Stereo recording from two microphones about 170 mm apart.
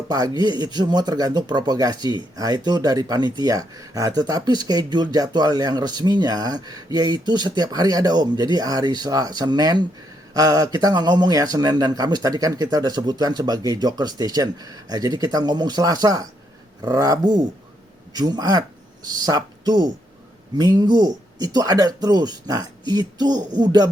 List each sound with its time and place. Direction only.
0.1 s speech: 25° right (ahead or behind)